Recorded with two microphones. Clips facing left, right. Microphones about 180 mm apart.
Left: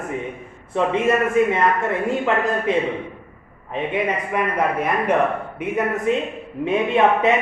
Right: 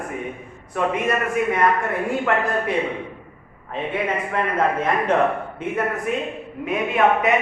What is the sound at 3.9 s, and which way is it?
Speech, 15° left (ahead or behind).